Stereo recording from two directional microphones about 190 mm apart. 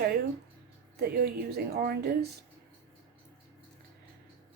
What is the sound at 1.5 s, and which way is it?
Speech, 55° right (ahead or behind).